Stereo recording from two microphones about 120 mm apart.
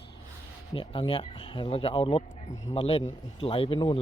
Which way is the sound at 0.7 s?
50° left (ahead or behind).